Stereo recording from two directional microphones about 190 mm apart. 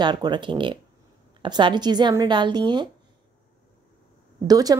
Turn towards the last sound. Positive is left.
turn(degrees=-20)  # may be behind; listen again after turning